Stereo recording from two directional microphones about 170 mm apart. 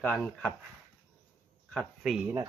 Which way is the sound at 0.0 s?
10° left (ahead or behind).